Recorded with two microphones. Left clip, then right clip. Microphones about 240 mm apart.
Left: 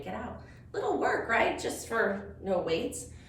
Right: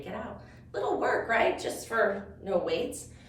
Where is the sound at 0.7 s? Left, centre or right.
Centre.